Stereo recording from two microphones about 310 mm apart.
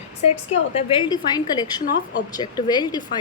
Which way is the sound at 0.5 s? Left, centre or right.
Centre.